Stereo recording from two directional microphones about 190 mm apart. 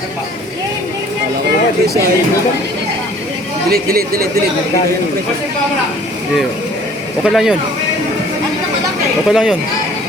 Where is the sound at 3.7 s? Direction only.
50° right (ahead or behind).